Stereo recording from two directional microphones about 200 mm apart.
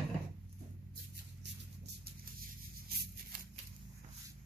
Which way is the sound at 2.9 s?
50° right (ahead or behind).